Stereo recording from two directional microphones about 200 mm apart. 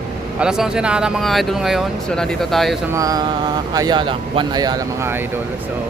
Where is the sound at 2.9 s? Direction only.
15° right (ahead or behind).